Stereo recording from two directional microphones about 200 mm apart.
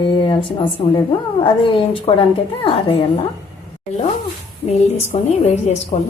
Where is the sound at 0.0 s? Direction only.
25° left (ahead or behind).